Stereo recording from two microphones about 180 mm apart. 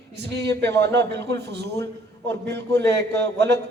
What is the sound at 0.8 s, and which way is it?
A man's voice, 70° right (ahead or behind).